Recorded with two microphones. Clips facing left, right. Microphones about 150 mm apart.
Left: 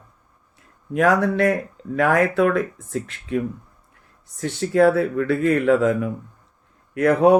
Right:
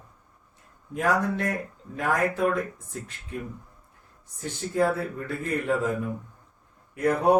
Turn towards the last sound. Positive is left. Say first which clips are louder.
# left 6 dB
turn(degrees=85)